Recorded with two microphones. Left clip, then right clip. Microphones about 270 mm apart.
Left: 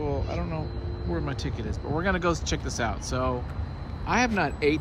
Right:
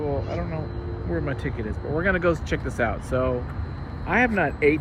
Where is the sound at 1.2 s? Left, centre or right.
Centre.